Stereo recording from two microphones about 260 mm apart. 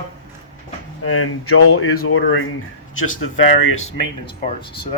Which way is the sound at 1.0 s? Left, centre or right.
Left.